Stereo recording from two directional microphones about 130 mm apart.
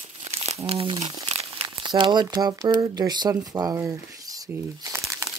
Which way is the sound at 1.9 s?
35° right (ahead or behind).